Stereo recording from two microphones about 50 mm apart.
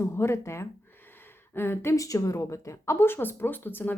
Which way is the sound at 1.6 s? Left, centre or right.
Left.